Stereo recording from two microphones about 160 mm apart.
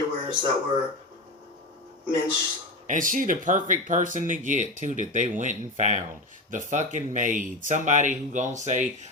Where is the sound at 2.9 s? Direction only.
55° right (ahead or behind).